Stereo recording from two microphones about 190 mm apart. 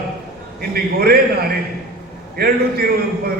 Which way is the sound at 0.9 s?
55° right (ahead or behind).